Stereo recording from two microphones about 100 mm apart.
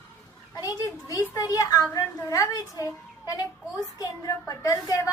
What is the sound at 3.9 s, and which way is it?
A woman's voice, 35° left (ahead or behind).